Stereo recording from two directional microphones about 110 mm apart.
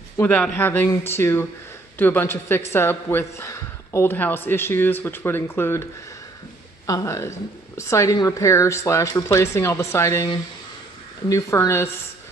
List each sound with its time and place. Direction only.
0.2 s a woman's voice: 15° left (ahead or behind)
6.9 s a woman's voice: 30° left (ahead or behind)
11.2 s a woman's voice: 30° left (ahead or behind)